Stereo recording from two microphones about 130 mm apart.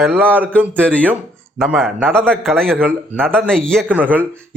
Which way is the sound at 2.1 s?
5° left (ahead or behind).